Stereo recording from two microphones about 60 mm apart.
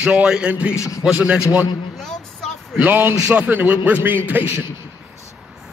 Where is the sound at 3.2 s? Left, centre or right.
Right.